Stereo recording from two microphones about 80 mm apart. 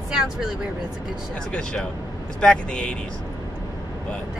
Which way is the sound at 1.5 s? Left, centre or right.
Centre.